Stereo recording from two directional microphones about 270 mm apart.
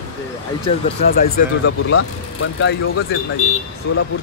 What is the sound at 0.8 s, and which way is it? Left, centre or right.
Speech, left.